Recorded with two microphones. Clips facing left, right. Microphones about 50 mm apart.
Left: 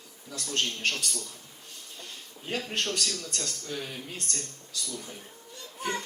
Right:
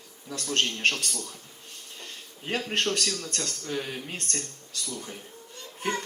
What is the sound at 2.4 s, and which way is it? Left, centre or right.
Speech, right.